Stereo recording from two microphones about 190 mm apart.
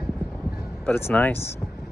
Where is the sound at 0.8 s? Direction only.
10° left (ahead or behind).